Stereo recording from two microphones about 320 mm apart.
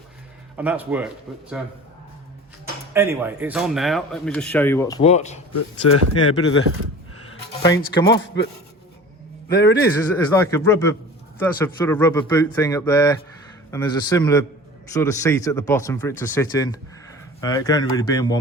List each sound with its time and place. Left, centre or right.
0.5 s a man's voice: centre
2.9 s a man's voice: centre; by 5.4 s left
5.5 s speech: left
7.6 s speech: centre
8.1 s speech: left
9.5 s speech: left
10.3 s speech: centre